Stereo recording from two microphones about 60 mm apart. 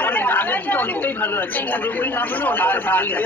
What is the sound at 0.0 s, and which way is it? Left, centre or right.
Speech, left.